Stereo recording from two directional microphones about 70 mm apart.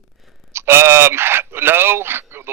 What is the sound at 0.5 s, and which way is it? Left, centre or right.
Speech, right.